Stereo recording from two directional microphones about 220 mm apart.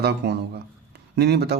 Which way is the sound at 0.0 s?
45° right (ahead or behind).